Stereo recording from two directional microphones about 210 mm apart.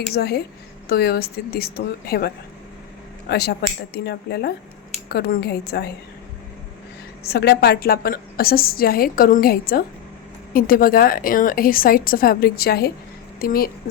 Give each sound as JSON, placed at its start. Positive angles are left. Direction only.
{"t": 0.1, "sound": "a woman's voice", "side_deg": 50}
{"t": 7.3, "sound": "a woman's voice", "side_deg": 50}